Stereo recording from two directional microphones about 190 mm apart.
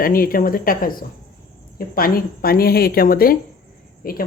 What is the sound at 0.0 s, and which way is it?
A man's voice, 50° left (ahead or behind).